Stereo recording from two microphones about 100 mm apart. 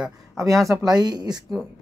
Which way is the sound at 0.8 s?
45° right (ahead or behind).